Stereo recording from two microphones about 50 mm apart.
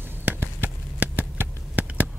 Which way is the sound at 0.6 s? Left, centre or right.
Right.